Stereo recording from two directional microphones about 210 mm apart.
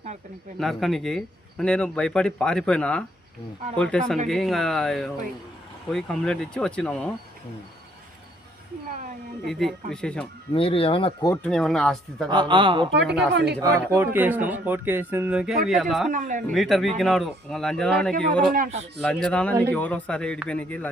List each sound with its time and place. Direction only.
0.6 s speech: centre (ahead or behind)
9.5 s speech: centre (ahead or behind)
10.5 s speech: 25° left (ahead or behind)
11.4 s speech: centre (ahead or behind)
12.3 s speech: 20° right (ahead or behind)
12.9 s a woman's voice: 55° right (ahead or behind)
13.6 s speech: 15° right (ahead or behind)
16.1 s speech: 40° right (ahead or behind)
16.5 s speech: centre (ahead or behind)
18.5 s speech: 35° right (ahead or behind)
19.0 s speech: 5° left (ahead or behind)